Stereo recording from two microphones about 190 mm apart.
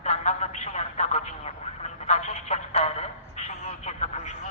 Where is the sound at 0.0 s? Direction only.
35° left (ahead or behind).